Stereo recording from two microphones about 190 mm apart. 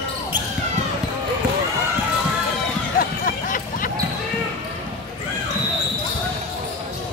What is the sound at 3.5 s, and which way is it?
Basketball bounce, 45° left (ahead or behind).